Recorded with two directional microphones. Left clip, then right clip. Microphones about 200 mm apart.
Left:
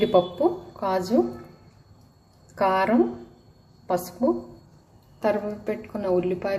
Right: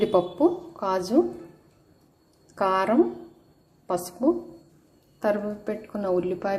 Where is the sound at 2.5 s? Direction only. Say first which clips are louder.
Left 1 dB; 10° right (ahead or behind).